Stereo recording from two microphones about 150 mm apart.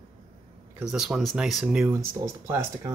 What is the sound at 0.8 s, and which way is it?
Speech, 5° right (ahead or behind).